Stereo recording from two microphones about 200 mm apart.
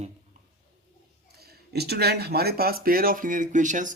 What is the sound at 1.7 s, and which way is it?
Speech, 55° right (ahead or behind).